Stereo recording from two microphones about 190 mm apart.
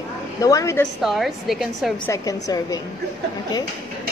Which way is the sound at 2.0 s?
15° left (ahead or behind).